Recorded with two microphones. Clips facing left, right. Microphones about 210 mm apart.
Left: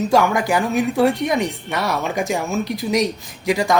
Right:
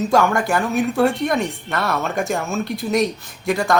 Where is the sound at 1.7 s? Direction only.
15° left (ahead or behind).